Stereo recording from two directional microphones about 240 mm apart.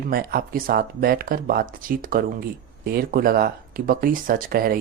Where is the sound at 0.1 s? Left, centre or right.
Right.